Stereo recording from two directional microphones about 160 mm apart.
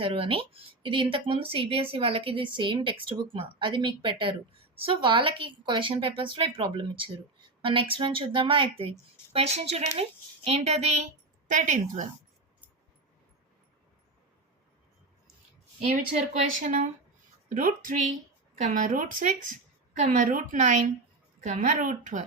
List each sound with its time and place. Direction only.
0.0 s a woman's voice: 35° right (ahead or behind); by 12.0 s 50° right (ahead or behind)
16.6 s a child's voice: 50° right (ahead or behind)